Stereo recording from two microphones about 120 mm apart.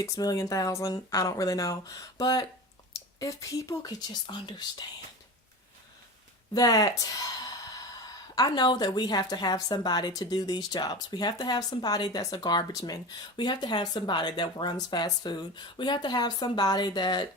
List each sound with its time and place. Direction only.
0.0 s speech: 30° left (ahead or behind)
6.5 s speech: 30° left (ahead or behind)